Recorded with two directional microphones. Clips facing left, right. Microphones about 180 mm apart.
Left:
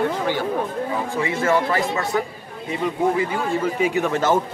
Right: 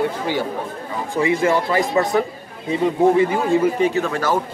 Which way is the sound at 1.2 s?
15° right (ahead or behind).